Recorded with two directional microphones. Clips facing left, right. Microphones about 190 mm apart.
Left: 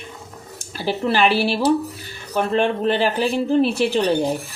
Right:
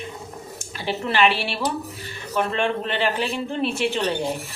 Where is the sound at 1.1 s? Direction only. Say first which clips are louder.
Left 3 dB; 35° left (ahead or behind).